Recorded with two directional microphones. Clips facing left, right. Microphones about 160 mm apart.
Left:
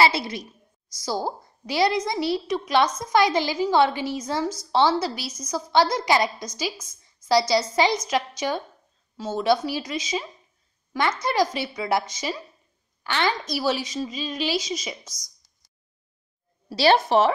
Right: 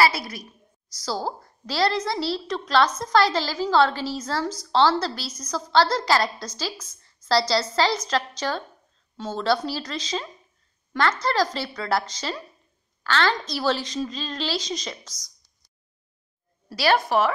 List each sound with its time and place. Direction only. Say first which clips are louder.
0.0 s a woman's voice: left 1 dB; 25° left (ahead or behind)
1.0 s a woman's voice: left 1 dB; 15° left (ahead or behind)
16.7 s a woman's voice: left 3 dB; 25° left (ahead or behind)